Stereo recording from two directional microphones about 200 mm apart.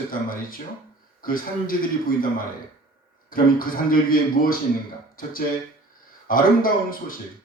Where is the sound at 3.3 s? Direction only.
45° left (ahead or behind).